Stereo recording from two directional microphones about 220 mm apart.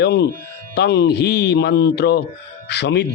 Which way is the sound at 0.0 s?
50° left (ahead or behind).